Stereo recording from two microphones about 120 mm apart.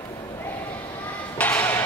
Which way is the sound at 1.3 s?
15° left (ahead or behind).